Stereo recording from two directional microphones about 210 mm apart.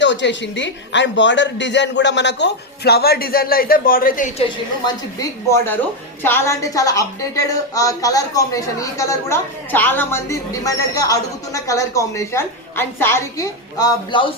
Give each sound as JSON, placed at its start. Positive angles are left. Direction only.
{"t": 0.0, "sound": "speech", "side_deg": 60}
{"t": 5.2, "sound": "a woman's voice", "side_deg": 15}